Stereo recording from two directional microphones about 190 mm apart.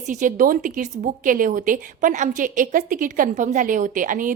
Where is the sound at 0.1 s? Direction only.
40° right (ahead or behind).